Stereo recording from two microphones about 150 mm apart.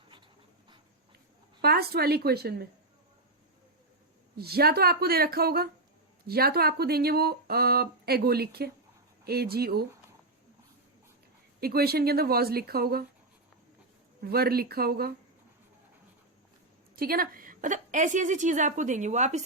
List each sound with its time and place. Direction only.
1.6 s speech: 90° right
4.4 s speech: 90° right
11.6 s speech: 90° right
14.2 s speech: 90° right
16.9 s a woman's voice: 75° right (ahead or behind); by 19.4 s 50° right (ahead or behind)